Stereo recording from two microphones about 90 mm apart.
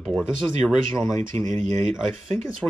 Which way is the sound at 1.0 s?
30° left (ahead or behind).